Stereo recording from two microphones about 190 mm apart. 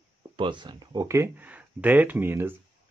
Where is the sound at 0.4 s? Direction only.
25° right (ahead or behind).